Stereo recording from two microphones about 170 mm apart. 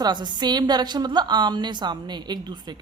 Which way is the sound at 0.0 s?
25° right (ahead or behind).